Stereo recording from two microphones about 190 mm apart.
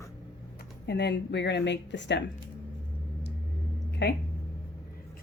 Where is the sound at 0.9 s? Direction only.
65° left (ahead or behind).